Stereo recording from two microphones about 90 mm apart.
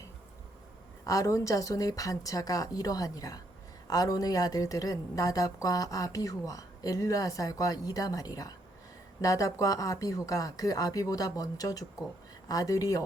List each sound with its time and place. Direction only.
1.0 s a woman's voice: 35° left (ahead or behind)